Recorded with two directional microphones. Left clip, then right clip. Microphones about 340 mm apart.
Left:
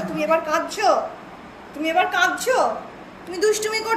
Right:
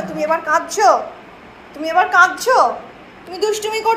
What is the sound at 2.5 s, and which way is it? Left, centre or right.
Speech, right.